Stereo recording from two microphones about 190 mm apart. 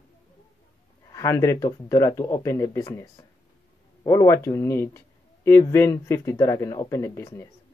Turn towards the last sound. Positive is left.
turn(degrees=15)  # may be behind; listen again after turning